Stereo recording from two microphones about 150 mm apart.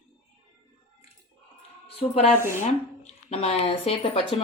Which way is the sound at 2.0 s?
45° left (ahead or behind).